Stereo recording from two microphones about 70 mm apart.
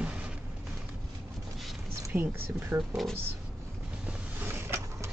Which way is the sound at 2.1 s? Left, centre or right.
Right.